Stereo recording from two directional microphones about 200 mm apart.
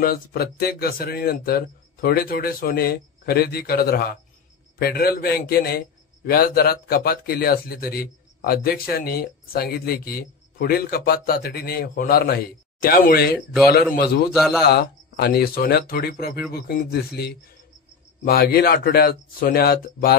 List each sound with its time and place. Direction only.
0.0 s a man's voice: 50° left (ahead or behind)
14.3 s speech: centre (ahead or behind)
14.6 s a man's voice: 55° left (ahead or behind)